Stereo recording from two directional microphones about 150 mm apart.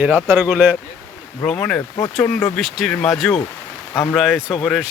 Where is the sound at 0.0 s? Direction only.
10° right (ahead or behind).